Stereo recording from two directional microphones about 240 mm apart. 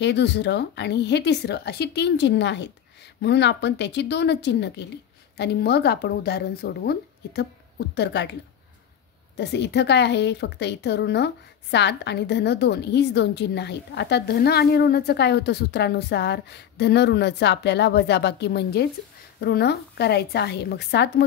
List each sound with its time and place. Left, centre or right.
0.0 s a woman's voice: left
9.4 s a woman's voice: left